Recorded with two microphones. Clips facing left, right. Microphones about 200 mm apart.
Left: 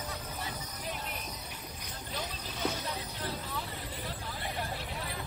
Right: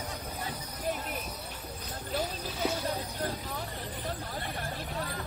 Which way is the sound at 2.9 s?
50° right (ahead or behind).